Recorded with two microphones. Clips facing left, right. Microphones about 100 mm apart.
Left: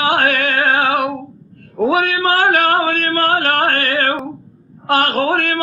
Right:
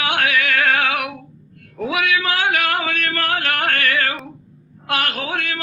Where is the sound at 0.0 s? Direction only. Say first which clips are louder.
Left 6 dB; 35° left (ahead or behind).